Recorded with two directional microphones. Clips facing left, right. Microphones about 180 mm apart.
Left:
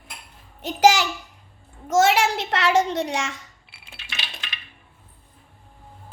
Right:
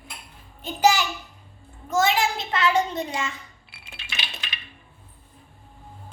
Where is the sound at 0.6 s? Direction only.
90° left.